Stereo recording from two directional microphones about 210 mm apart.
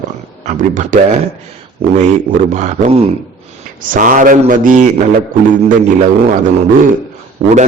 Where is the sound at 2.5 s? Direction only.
35° right (ahead or behind).